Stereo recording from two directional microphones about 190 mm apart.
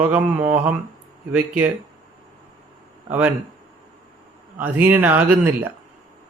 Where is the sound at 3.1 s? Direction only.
10° right (ahead or behind).